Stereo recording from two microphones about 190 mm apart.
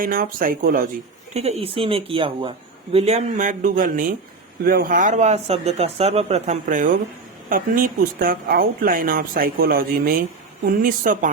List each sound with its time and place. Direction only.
0.0 s speech: 50° right (ahead or behind)
1.3 s speech: 35° right (ahead or behind)